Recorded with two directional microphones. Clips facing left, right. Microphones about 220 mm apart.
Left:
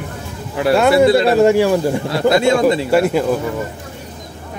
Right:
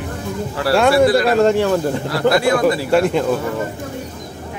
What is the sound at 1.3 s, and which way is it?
Speech, 10° left (ahead or behind).